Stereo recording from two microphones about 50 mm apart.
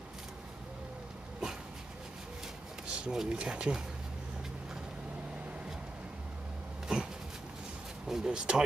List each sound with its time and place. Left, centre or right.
2.9 s speech: centre
6.9 s a sound: centre
8.1 s speech: centre